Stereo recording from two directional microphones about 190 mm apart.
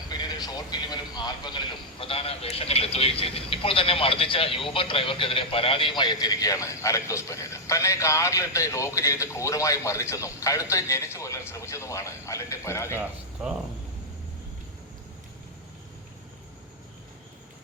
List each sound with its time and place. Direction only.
0.1 s a man's voice: 20° left (ahead or behind)